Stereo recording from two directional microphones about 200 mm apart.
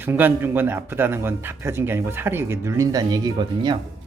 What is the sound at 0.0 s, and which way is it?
Speech, 10° right (ahead or behind).